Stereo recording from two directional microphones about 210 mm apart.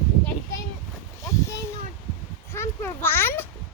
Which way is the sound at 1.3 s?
15° left (ahead or behind).